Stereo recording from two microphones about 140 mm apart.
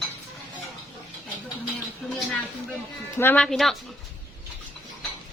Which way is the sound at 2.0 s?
5° right (ahead or behind).